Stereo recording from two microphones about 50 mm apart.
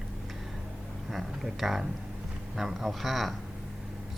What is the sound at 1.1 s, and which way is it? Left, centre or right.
Speech, centre.